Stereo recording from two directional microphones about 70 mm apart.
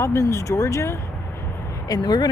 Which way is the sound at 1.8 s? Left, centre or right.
Left.